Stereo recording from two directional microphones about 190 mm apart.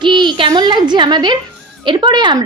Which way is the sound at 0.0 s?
25° right (ahead or behind).